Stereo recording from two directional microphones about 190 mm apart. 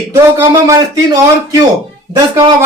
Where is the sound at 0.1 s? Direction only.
20° right (ahead or behind).